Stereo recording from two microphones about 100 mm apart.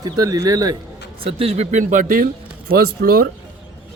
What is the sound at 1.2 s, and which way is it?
Speech, 70° right (ahead or behind).